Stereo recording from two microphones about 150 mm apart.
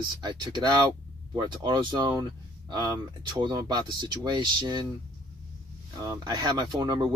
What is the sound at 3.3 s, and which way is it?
Speech, 30° right (ahead or behind).